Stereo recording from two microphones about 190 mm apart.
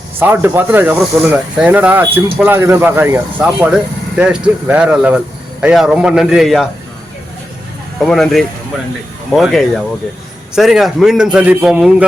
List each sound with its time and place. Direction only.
0.2 s speech: 10° right (ahead or behind)
8.0 s speech: centre (ahead or behind)